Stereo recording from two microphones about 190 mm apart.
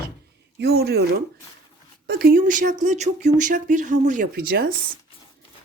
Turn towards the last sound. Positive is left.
turn(degrees=-50)  # may be behind; listen again after turning